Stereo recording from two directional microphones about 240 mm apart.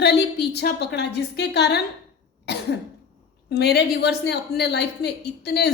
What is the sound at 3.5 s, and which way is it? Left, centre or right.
A woman's voice, left.